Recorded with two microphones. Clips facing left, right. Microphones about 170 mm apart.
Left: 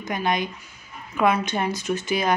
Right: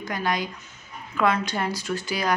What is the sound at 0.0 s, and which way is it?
Speech, 20° left (ahead or behind).